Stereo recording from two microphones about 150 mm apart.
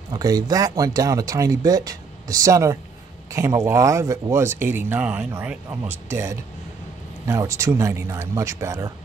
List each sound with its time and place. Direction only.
0.1 s speech: 25° right (ahead or behind)